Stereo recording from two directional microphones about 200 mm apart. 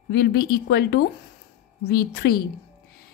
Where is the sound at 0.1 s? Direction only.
50° left (ahead or behind).